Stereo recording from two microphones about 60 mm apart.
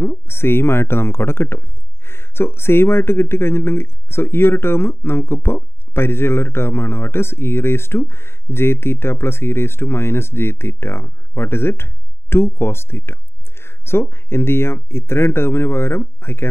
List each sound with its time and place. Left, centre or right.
0.0 s speech: left